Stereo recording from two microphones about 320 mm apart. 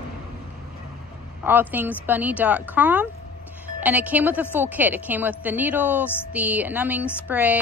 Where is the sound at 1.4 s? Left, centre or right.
Centre.